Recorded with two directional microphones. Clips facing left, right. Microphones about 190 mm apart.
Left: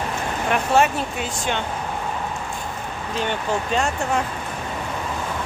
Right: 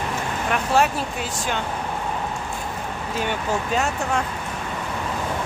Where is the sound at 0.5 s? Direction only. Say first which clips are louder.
Left 2 dB; centre (ahead or behind).